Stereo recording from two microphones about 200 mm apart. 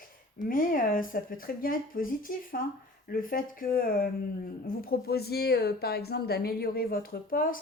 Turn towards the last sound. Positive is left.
turn(degrees=45)  # may be behind; listen again after turning